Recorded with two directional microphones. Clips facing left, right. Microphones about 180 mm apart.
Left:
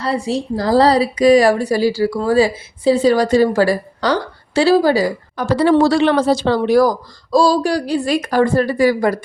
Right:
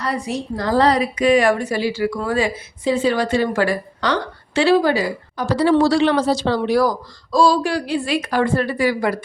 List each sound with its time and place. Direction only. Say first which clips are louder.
0.0 s a woman's voice: left 4 dB; 30° left (ahead or behind)
5.4 s speech: left 3 dB; 55° left (ahead or behind)